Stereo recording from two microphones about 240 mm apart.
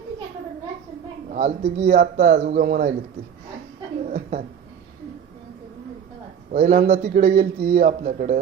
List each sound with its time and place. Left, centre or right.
1.3 s a man's voice: right
4.1 s a sound: right
6.5 s a man's voice: right